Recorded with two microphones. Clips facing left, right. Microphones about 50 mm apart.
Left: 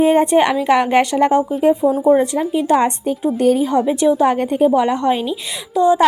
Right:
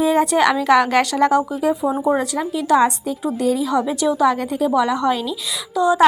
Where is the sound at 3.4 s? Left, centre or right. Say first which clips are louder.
Left 5 dB; left.